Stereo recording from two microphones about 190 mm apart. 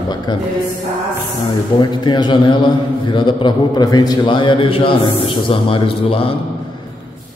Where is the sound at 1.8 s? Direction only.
25° left (ahead or behind).